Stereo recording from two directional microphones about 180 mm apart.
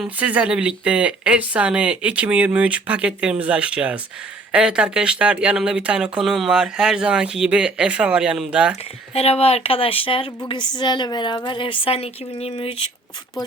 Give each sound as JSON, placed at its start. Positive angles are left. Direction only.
{"t": 0.0, "sound": "speech", "side_deg": -10}
{"t": 9.1, "sound": "a woman's voice", "side_deg": 35}